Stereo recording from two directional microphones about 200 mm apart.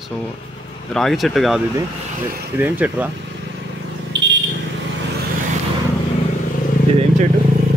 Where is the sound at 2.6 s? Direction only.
10° right (ahead or behind).